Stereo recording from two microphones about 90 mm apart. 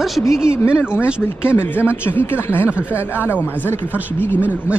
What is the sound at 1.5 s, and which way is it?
Speech, 25° left (ahead or behind).